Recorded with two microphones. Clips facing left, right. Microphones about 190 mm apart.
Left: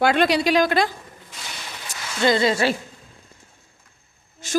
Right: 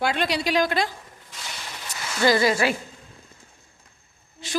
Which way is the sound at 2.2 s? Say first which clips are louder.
Left 1 dB; 25° left (ahead or behind).